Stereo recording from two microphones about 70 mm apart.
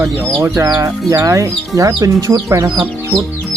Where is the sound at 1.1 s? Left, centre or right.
Right.